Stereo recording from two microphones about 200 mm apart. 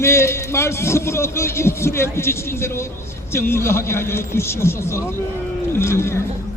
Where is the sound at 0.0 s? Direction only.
15° left (ahead or behind).